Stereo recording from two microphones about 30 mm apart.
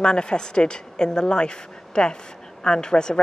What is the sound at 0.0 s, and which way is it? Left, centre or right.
Speech, left.